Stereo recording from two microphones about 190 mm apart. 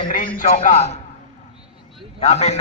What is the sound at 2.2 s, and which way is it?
Speech, 35° left (ahead or behind).